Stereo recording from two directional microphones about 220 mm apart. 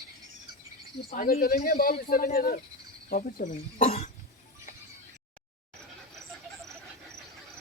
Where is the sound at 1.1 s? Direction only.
40° left (ahead or behind).